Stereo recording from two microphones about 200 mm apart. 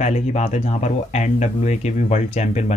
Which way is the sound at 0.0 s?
35° left (ahead or behind).